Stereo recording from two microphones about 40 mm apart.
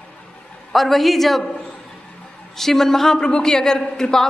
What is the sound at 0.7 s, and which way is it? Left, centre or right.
Speech, centre.